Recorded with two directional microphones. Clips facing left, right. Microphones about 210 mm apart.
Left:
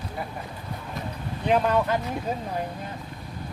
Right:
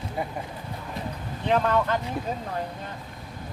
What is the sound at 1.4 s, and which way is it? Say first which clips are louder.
Speech: left 1 dB; 15° left (ahead or behind).